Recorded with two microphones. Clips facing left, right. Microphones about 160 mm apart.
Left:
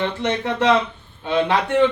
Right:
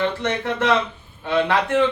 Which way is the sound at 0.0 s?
20° left (ahead or behind).